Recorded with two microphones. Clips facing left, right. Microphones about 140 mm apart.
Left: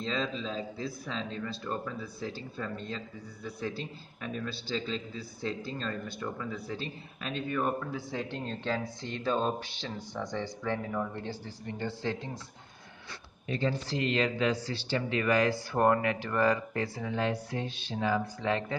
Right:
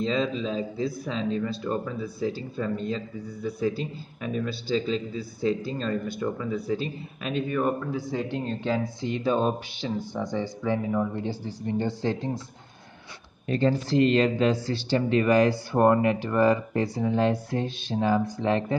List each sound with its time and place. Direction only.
0.0 s a man's voice: 5° right (ahead or behind)
11.6 s speech: 25° right (ahead or behind)
13.5 s speech: 45° right (ahead or behind)
15.0 s speech: 30° right (ahead or behind)
16.8 s speech: 30° right (ahead or behind)